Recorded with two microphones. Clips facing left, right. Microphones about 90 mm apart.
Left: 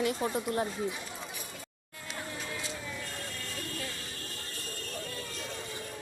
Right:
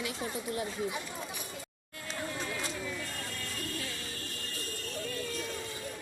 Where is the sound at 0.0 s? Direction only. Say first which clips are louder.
Left 6 dB; 50° left (ahead or behind).